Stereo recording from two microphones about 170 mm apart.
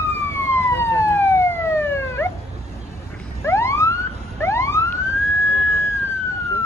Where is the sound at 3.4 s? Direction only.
15° left (ahead or behind).